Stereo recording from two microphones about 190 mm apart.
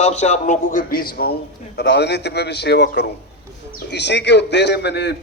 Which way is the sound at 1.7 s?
65° left (ahead or behind).